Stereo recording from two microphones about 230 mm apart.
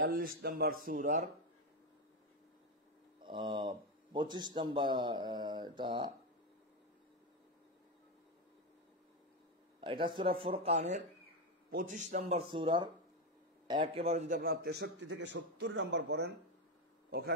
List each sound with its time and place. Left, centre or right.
0.0 s a man's voice: right
3.3 s a man's voice: centre
9.8 s a man's voice: right